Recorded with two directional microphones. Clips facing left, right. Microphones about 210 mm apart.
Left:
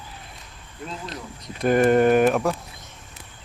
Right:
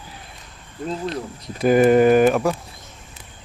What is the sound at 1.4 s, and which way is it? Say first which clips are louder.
Speech: right 3 dB; 5° right (ahead or behind).